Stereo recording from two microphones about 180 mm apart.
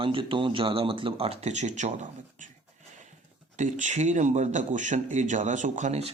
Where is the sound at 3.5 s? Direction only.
45° right (ahead or behind).